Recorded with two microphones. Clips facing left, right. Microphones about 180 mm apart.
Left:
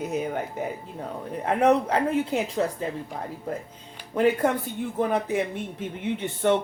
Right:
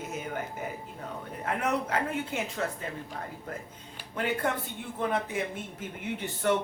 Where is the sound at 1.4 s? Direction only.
35° left (ahead or behind).